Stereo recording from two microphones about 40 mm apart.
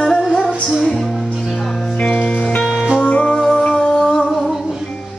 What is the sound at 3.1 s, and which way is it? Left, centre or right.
Music, left.